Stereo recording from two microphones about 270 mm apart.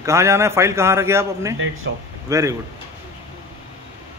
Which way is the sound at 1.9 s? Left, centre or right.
Right.